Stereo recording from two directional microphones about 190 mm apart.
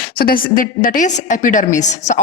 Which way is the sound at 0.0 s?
50° left (ahead or behind).